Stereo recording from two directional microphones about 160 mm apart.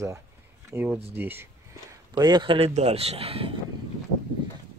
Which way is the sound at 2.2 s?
25° right (ahead or behind).